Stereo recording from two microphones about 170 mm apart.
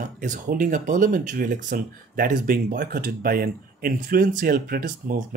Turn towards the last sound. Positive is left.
turn(degrees=-55)  # may be behind; listen again after turning